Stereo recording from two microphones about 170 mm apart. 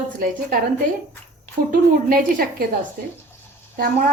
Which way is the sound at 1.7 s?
55° right (ahead or behind).